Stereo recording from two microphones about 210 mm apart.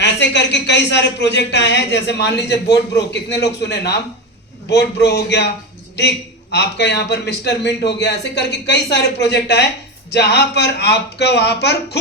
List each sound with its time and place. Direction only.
0.0 s a man's voice: 55° left (ahead or behind)